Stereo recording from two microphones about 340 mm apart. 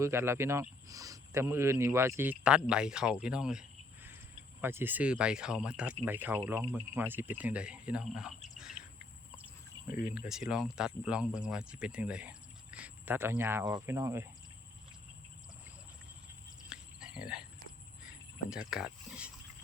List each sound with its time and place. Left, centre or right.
0.0 s speech: centre
9.9 s speech: left
10.2 s speech: centre
16.6 s a sound: centre
18.5 s speech: centre